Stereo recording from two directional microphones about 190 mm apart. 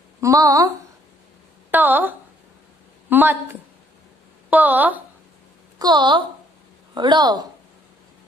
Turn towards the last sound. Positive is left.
turn(degrees=-20)  # may be behind; listen again after turning